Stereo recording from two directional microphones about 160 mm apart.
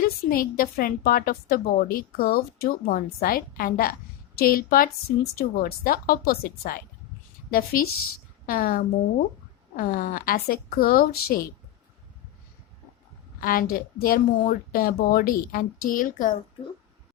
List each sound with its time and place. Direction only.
0.0 s a woman's voice: 65° left (ahead or behind)
13.4 s a woman's voice: 65° left (ahead or behind)